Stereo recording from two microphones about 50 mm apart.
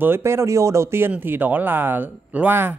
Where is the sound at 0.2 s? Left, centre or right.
Right.